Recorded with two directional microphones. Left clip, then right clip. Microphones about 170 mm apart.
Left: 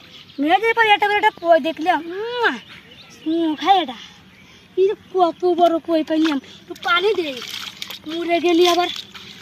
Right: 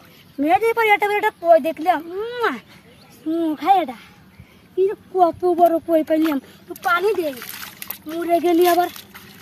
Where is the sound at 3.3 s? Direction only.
5° right (ahead or behind).